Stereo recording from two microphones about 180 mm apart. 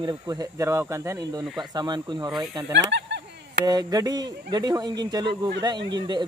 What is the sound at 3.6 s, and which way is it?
Speech, 20° right (ahead or behind).